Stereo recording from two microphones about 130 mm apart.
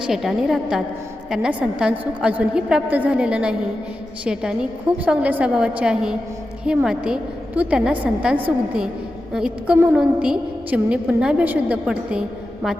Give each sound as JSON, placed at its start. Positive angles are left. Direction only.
{"t": 0.0, "sound": "a woman's voice", "side_deg": -5}